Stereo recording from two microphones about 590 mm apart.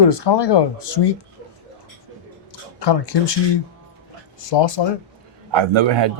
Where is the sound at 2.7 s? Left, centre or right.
Left.